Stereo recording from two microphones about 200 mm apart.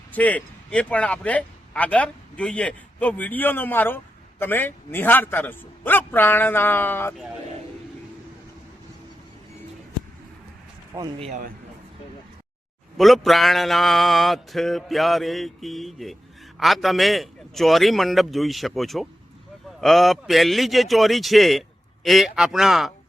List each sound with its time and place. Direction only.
0.1 s speech: 5° left (ahead or behind)
10.9 s speech: 20° right (ahead or behind)
11.3 s a man's voice: 40° right (ahead or behind)
13.0 s a sound: centre (ahead or behind)